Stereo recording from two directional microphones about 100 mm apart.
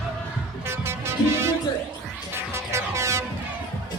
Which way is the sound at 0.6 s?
25° right (ahead or behind).